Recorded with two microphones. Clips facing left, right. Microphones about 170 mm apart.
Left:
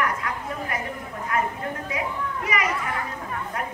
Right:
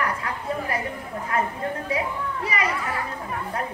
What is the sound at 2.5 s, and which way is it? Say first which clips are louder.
Speech: left 1 dB; 30° right (ahead or behind).